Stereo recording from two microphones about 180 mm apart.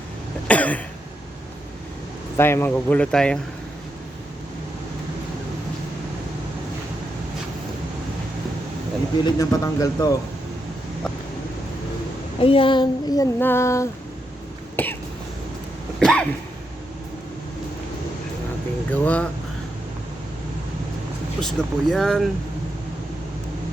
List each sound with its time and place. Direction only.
0.4 s cough: 10° left (ahead or behind)
2.4 s speech: 15° left (ahead or behind)
9.2 s child singing: 20° left (ahead or behind)
12.4 s child singing: 30° left (ahead or behind)
14.8 s speech: 10° left (ahead or behind)
16.0 s cough: 5° left (ahead or behind)
18.9 s speech: 5° left (ahead or behind)
21.4 s speech: centre (ahead or behind)